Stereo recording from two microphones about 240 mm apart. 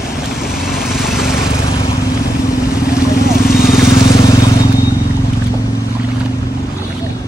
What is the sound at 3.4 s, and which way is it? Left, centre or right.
Vehicle, left.